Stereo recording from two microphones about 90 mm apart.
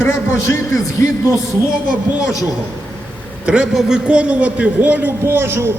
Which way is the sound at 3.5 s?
10° right (ahead or behind).